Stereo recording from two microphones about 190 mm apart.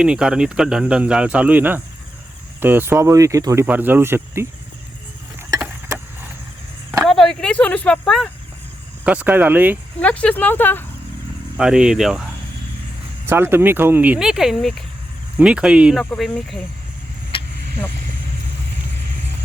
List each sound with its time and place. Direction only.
0.0 s speech: 5° right (ahead or behind)
5.5 s vehicle: 10° right (ahead or behind)
7.0 s a sound: centre (ahead or behind)
9.0 s speech: 10° right (ahead or behind)
10.0 s speech: 5° left (ahead or behind)
11.5 s speech: 5° right (ahead or behind)
13.2 s speech: 10° right (ahead or behind)